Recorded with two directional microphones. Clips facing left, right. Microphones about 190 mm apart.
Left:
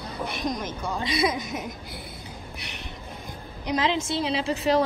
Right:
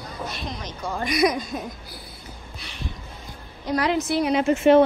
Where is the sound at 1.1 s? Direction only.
25° left (ahead or behind).